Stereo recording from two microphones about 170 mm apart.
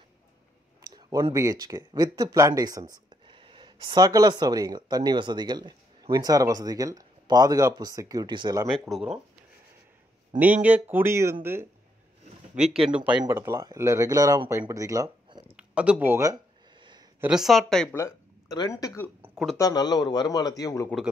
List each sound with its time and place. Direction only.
0.9 s speech: 25° right (ahead or behind)
8.6 s speech: centre (ahead or behind)
10.4 s speech: 10° right (ahead or behind)
12.5 s speech: 40° right (ahead or behind)
12.8 s speech: 10° right (ahead or behind); by 15.5 s 25° right (ahead or behind)
15.5 s speech: 5° right (ahead or behind)
17.2 s speech: 5° right (ahead or behind)
17.9 s speech: 20° left (ahead or behind)
19.2 s a sound: 5° right (ahead or behind)
19.5 s a man's voice: 20° left (ahead or behind)